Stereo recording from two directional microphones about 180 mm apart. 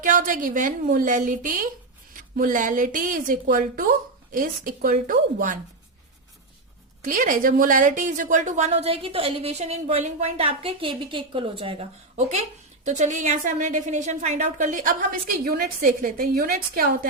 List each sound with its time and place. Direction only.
0.0 s a woman's voice: 45° right (ahead or behind)
7.0 s a woman's voice: 45° right (ahead or behind)